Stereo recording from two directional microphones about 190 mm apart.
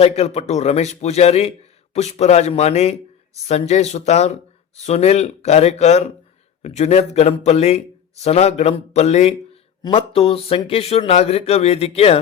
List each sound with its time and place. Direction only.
0.0 s a man's voice: 35° left (ahead or behind)